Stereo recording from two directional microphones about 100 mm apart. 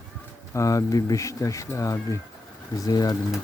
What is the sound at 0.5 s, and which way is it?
Speech, 30° left (ahead or behind).